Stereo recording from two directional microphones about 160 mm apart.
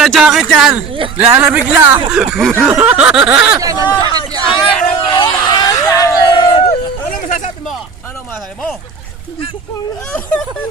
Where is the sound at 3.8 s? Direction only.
30° left (ahead or behind).